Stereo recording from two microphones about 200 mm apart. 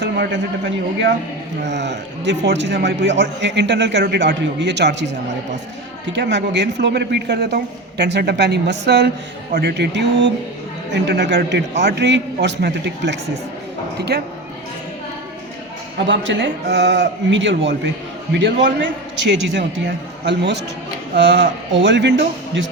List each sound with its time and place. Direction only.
0.0 s a man's voice: 60° right (ahead or behind)
6.1 s a man's voice: 60° right (ahead or behind)
16.0 s a man's voice: 65° right (ahead or behind)